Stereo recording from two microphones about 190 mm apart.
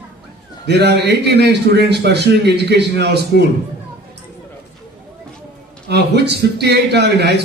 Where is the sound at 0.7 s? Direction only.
60° right (ahead or behind).